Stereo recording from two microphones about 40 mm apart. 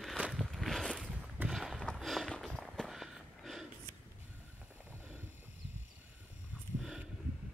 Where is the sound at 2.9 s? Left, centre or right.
Centre.